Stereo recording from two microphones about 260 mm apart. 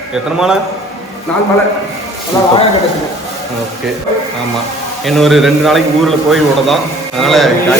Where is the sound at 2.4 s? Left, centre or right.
Centre.